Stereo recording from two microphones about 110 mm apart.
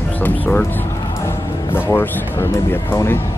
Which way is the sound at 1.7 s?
20° left (ahead or behind).